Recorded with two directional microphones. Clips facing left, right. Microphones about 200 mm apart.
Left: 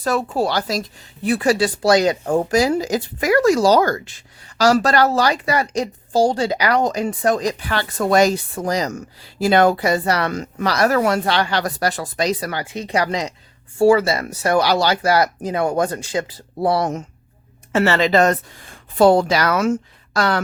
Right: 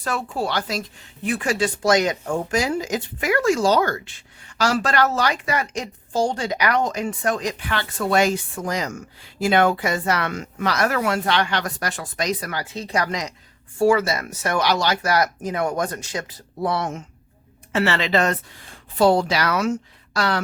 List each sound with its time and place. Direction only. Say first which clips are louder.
0.0 s a woman's voice: left 6 dB; 40° left (ahead or behind)